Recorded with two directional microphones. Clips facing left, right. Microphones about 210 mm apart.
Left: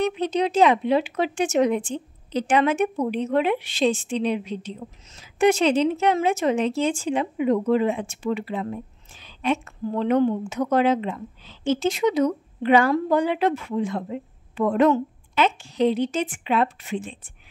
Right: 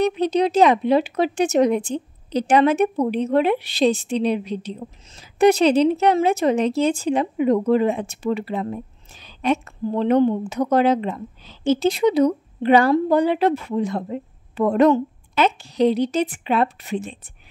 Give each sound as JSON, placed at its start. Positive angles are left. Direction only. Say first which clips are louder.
{"t": 0.0, "sound": "speech", "louder": "right 4 dB", "side_deg": -40}